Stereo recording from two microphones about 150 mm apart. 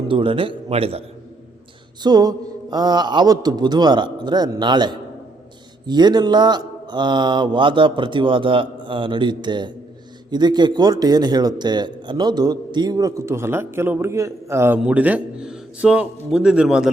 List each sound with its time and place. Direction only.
0.1 s speech: 35° right (ahead or behind)
2.0 s a man's voice: 25° right (ahead or behind); by 16.9 s 5° right (ahead or behind)